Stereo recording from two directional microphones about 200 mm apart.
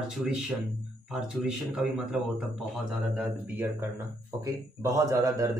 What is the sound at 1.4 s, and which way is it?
Speech, 5° right (ahead or behind).